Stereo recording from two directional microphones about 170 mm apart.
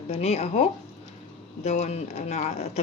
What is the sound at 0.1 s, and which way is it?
Speech, 40° left (ahead or behind).